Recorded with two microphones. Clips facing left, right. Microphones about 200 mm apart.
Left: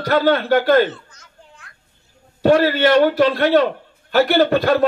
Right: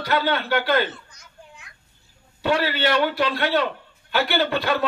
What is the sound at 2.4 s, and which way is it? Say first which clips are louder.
A man's voice: left 8 dB; 45° left (ahead or behind).